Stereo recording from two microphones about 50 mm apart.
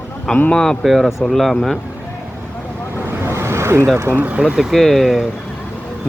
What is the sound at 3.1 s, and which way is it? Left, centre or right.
Vehicle, right.